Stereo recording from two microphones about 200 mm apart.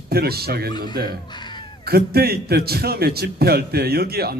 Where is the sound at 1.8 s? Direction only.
50° right (ahead or behind).